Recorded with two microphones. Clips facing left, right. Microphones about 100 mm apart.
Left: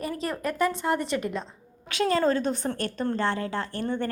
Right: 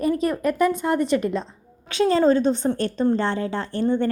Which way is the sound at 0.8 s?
20° left (ahead or behind).